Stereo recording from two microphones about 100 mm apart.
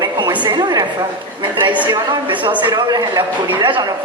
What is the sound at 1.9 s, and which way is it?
A woman's voice, 55° right (ahead or behind).